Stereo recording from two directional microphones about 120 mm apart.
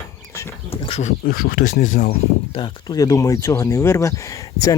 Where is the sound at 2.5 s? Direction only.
45° left (ahead or behind).